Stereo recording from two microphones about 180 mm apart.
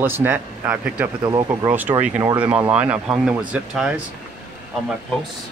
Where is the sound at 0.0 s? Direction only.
10° right (ahead or behind).